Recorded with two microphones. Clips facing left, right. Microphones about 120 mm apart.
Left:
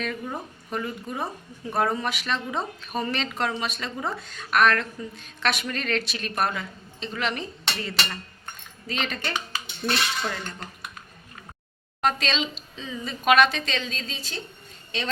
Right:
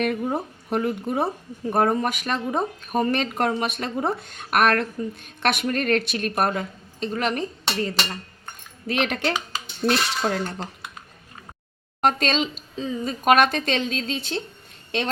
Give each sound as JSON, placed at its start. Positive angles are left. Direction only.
{"t": 0.0, "sound": "speech", "side_deg": -55}
{"t": 1.7, "sound": "speech", "side_deg": -50}
{"t": 8.9, "sound": "speech", "side_deg": -65}
{"t": 9.8, "sound": "speech", "side_deg": -45}
{"t": 12.0, "sound": "speech", "side_deg": -50}